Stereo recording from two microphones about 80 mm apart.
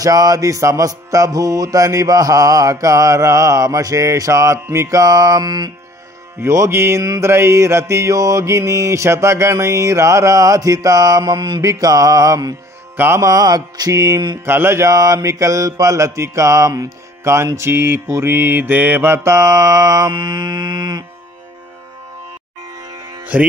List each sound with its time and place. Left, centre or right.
0.0 s music: right
6.4 s mantra: right
11.6 s music: right
12.9 s music: right
13.2 s music: right
14.4 s mantra: right
20.1 s mantra: right
22.6 s music: right